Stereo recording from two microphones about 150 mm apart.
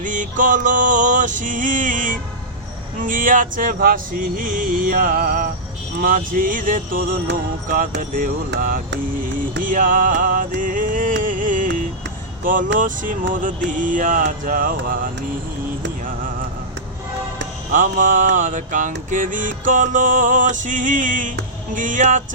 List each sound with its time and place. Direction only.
0.0 s mantra: 60° right (ahead or behind)
6.0 s a sound: 65° right (ahead or behind)
9.6 s music: 65° right (ahead or behind)
12.5 s mantra: 65° right (ahead or behind)
17.7 s mantra: 60° right (ahead or behind)